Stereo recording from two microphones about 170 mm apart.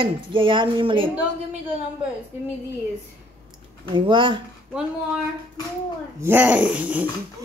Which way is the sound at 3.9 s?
30° right (ahead or behind).